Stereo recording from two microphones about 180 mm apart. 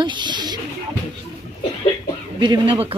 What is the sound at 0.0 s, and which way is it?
Snake, 25° right (ahead or behind).